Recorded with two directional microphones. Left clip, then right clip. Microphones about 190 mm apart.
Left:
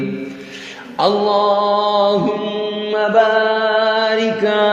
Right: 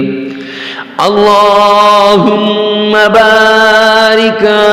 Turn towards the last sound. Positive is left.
turn(degrees=-35)  # may be behind; listen again after turning